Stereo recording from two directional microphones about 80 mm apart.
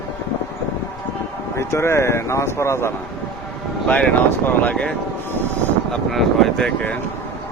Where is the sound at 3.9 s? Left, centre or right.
Centre.